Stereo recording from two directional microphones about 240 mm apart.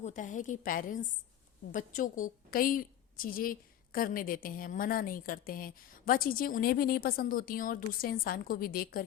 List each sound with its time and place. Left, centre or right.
0.0 s a woman's voice: left